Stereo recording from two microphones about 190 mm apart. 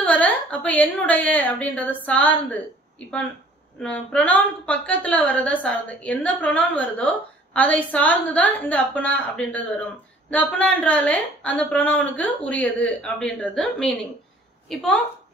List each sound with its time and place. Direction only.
0.0 s a woman's voice: 10° left (ahead or behind)
3.8 s a woman's voice: 5° left (ahead or behind)